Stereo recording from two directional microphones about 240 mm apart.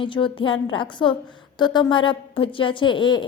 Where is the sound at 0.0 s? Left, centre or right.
Left.